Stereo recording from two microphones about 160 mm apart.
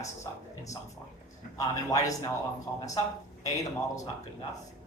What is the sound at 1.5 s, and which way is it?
Speech, 20° left (ahead or behind).